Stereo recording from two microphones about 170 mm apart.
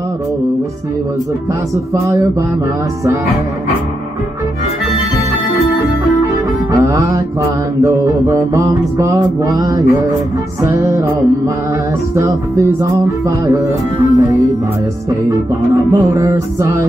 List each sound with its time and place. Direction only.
6.7 s music: 15° right (ahead or behind)
7.8 s mantra: 20° right (ahead or behind)
10.6 s music: 15° right (ahead or behind)
12.2 s mantra: 20° right (ahead or behind)
14.1 s mantra: 20° right (ahead or behind)